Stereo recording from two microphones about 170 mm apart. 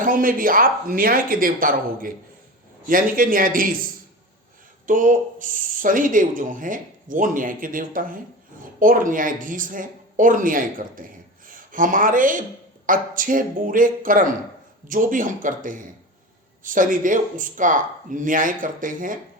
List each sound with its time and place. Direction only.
0.0 s speech: 55° right (ahead or behind)
4.9 s speech: 50° right (ahead or behind)